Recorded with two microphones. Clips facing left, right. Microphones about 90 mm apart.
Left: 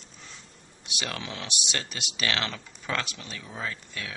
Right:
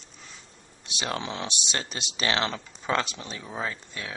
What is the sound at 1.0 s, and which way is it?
Speech, 25° right (ahead or behind).